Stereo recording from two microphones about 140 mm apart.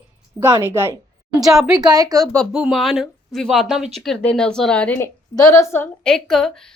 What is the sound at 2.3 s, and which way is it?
A woman's voice, centre (ahead or behind).